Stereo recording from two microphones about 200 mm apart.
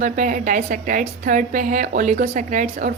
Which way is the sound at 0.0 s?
40° right (ahead or behind).